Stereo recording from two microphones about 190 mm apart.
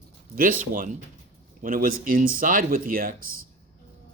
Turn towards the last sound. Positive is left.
turn(degrees=-50)  # may be behind; listen again after turning